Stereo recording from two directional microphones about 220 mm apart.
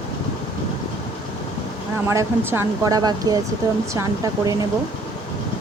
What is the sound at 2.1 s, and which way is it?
Speech, 10° right (ahead or behind).